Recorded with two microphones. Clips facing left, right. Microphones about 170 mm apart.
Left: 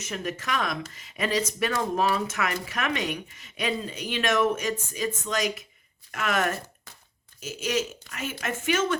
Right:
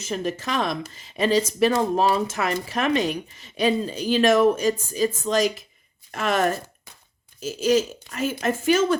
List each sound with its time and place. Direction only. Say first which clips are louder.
0.0 s speech: right 5 dB; 30° right (ahead or behind)